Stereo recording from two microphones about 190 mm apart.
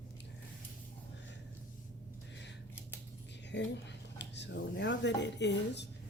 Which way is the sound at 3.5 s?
65° left (ahead or behind).